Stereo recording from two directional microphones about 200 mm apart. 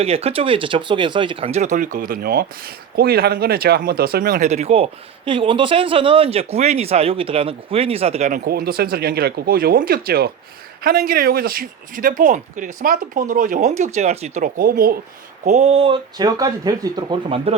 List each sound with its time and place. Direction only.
0.0 s speech: 30° right (ahead or behind); by 4.4 s 50° right (ahead or behind)
4.4 s speech: 35° right (ahead or behind)
8.4 s speech: 50° right (ahead or behind)
15.4 s speech: 35° right (ahead or behind); by 17.2 s 20° right (ahead or behind)
17.2 s speech: 30° right (ahead or behind)